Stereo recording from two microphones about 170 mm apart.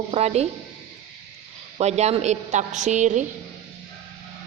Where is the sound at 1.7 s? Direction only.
40° right (ahead or behind).